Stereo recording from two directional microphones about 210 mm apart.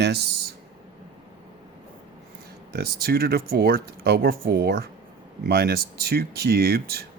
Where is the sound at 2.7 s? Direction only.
50° right (ahead or behind).